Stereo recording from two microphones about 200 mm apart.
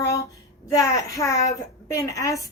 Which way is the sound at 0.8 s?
15° left (ahead or behind).